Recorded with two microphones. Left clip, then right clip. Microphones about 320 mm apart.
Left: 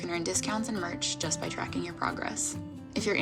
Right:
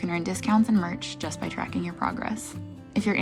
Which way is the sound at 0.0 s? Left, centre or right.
Right.